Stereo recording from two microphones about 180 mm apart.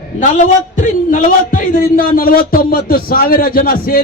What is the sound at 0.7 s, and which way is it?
A man's voice, 45° left (ahead or behind).